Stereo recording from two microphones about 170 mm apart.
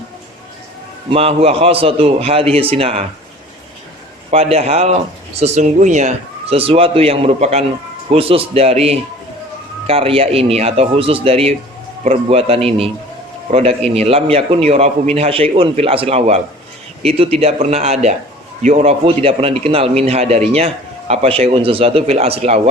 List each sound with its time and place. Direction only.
1.1 s speech: 35° right (ahead or behind)
4.3 s speech: 35° right (ahead or behind)